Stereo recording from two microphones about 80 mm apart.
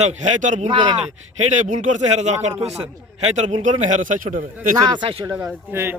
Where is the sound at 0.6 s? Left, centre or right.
Right.